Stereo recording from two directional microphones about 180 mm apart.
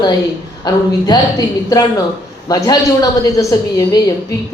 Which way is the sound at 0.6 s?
20° left (ahead or behind).